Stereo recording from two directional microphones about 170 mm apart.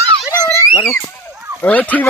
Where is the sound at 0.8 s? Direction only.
10° left (ahead or behind).